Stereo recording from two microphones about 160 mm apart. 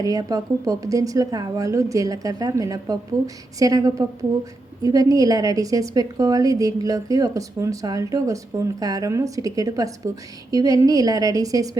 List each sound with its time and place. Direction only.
0.0 s a woman's voice: 20° right (ahead or behind)